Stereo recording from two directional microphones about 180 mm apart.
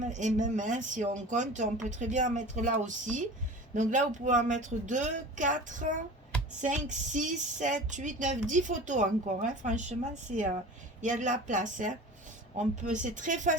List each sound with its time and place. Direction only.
0.0 s speech: 40° right (ahead or behind)